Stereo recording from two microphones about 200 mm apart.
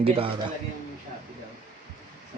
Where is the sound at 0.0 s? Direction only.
30° right (ahead or behind).